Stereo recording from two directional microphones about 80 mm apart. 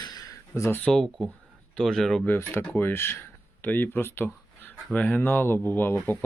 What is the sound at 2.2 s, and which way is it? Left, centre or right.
Speech, left.